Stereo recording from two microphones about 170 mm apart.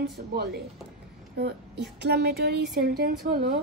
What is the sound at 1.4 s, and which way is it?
A woman's voice, 80° right.